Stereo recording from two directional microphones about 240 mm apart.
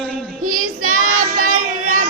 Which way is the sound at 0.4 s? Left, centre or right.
Right.